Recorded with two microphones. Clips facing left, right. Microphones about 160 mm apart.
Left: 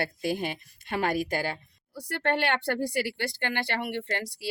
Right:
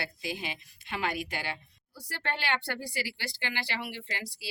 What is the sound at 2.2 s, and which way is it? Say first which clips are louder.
Speech: left 6 dB; 55° left (ahead or behind).